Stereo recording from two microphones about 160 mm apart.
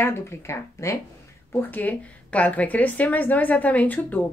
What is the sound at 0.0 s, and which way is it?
A woman's voice, 15° left (ahead or behind).